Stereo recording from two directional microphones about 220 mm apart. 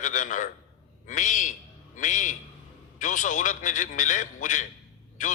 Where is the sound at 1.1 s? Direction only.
35° left (ahead or behind).